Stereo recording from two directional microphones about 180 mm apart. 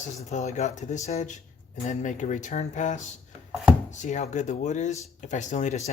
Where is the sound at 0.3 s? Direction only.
40° left (ahead or behind).